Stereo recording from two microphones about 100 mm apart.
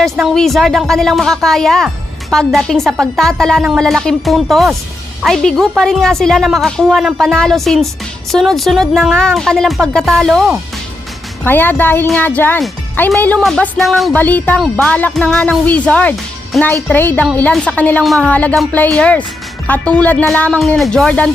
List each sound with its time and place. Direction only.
0.0 s speech: centre (ahead or behind)
11.4 s speech: 20° left (ahead or behind)
13.7 s speech: centre (ahead or behind)
14.1 s speech: 15° left (ahead or behind)
15.6 s speech: 15° left (ahead or behind)
16.5 s speech: centre (ahead or behind)
16.9 s speech: 20° left (ahead or behind)
20.7 s speech: 5° left (ahead or behind)